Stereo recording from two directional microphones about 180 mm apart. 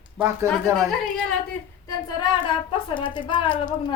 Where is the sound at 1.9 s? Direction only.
25° left (ahead or behind).